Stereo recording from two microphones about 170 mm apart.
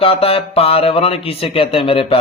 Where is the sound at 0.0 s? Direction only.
35° left (ahead or behind).